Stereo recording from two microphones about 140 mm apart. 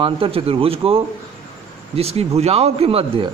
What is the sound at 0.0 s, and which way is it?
A man's voice, 40° right (ahead or behind).